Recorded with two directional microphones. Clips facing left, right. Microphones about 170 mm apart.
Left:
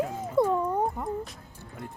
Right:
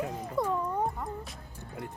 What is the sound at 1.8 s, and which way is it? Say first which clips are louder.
Speech: right 1 dB; 25° left (ahead or behind).